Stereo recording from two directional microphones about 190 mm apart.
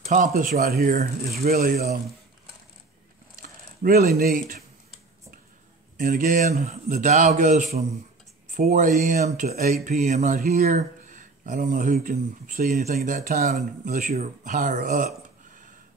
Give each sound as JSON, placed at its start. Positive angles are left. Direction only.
{"t": 0.0, "sound": "speech", "side_deg": -40}
{"t": 3.8, "sound": "speech", "side_deg": -50}
{"t": 5.9, "sound": "a man's voice", "side_deg": -45}